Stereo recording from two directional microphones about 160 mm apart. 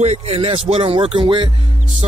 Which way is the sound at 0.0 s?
45° right (ahead or behind).